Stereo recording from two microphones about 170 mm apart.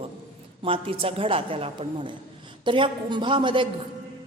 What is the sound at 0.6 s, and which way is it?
A woman's voice, 30° right (ahead or behind).